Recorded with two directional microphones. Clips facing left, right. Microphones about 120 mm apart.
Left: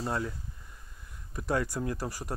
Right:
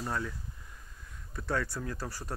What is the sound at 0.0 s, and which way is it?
Speech, 25° left (ahead or behind).